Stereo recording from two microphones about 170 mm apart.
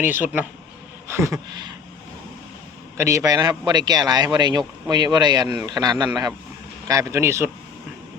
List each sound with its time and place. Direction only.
0.0 s a man's voice: 10° right (ahead or behind)
3.0 s a man's voice: 15° right (ahead or behind)